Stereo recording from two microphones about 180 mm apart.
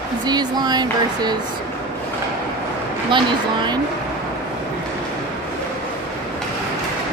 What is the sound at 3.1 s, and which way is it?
Speech, 25° right (ahead or behind).